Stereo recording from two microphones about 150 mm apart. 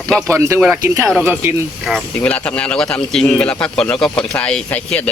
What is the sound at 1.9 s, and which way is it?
Speech, 10° left (ahead or behind).